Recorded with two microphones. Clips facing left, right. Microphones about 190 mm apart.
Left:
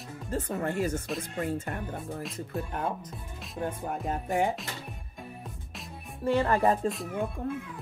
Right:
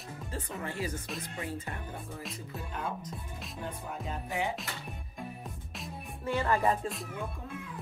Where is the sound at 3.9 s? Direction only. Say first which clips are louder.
Left 6 dB; 50° left (ahead or behind).